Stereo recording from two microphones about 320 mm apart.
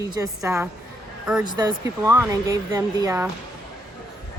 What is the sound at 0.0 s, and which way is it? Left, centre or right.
A woman's voice, centre.